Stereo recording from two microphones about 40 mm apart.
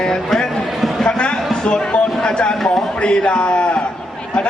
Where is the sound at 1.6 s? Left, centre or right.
Left.